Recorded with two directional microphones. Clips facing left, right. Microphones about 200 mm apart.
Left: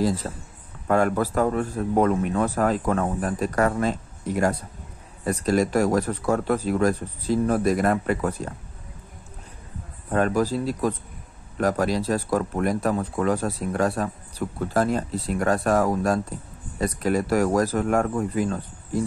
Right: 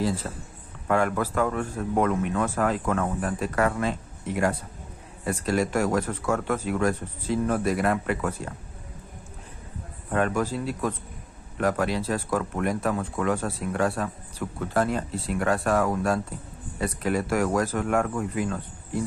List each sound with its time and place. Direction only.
0.8 s a man's voice: 40° left (ahead or behind)
10.1 s a man's voice: 35° left (ahead or behind)